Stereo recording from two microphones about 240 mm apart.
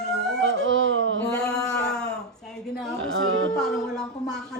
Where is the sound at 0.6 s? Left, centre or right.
Right.